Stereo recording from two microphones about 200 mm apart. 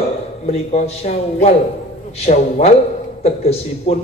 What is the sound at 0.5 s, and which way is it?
A man's voice, 30° left (ahead or behind).